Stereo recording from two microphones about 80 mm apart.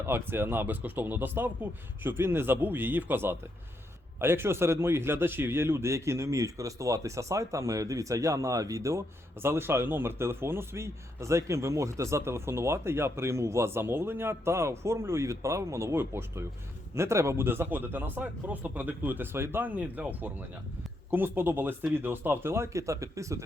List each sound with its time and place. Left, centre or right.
0.0 s a man's voice: right